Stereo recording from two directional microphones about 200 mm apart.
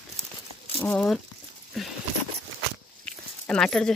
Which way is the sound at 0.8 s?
5° left (ahead or behind).